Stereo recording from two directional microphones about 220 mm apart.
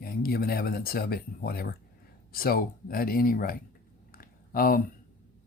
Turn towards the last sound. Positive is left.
turn(degrees=40)  # may be behind; listen again after turning